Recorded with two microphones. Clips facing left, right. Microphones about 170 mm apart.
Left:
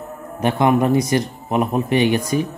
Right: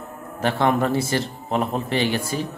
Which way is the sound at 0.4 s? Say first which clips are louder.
Left 4 dB; 15° left (ahead or behind).